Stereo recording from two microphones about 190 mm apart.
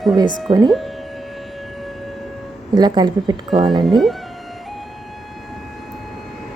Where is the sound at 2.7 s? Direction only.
20° right (ahead or behind).